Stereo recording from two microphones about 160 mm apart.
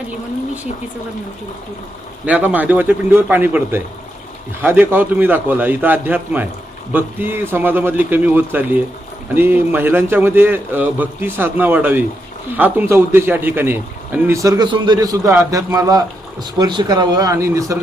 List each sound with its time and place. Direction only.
2.2 s a man's voice: 10° right (ahead or behind)